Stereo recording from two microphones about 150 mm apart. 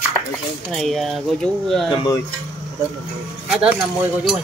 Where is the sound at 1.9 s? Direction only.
30° left (ahead or behind).